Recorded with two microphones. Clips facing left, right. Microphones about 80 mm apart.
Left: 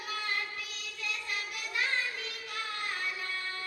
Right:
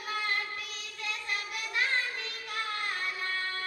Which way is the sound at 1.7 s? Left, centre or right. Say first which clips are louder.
Right 2 dB; right.